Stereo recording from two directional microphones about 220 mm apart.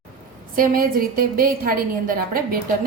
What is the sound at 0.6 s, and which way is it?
A woman's voice, 40° right (ahead or behind).